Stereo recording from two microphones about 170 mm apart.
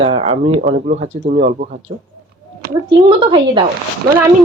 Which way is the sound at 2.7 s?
20° right (ahead or behind).